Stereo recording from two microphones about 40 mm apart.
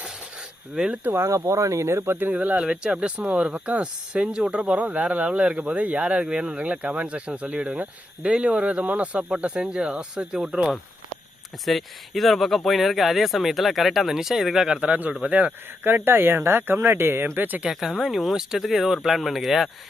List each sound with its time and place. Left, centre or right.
0.8 s speech: right
2.0 s speech: right
2.6 s speech: right
4.7 s speech: right
10.3 s speech: centre
11.6 s speech: centre
14.7 s speech: right
15.8 s speech: right
17.7 s speech: centre